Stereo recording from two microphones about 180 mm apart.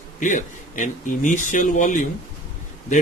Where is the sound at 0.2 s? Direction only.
45° left (ahead or behind).